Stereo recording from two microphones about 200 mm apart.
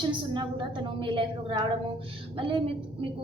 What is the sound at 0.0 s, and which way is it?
A woman's voice, 25° right (ahead or behind).